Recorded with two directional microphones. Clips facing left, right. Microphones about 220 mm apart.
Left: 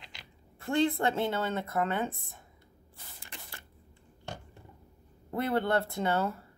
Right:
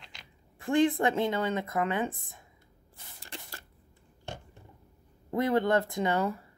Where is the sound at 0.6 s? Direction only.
15° right (ahead or behind).